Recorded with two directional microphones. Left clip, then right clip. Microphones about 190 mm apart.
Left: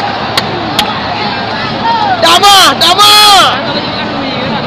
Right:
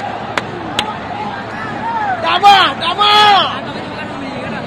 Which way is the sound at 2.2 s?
45° left (ahead or behind).